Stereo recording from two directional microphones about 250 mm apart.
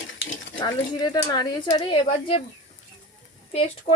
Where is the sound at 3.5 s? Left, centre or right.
Left.